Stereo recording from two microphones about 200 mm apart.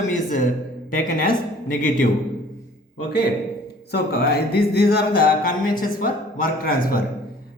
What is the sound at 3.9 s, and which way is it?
Music, 50° left (ahead or behind).